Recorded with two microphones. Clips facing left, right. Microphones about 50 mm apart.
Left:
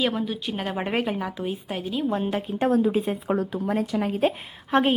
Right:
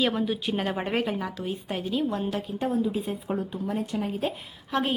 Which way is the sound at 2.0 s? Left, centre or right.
Left.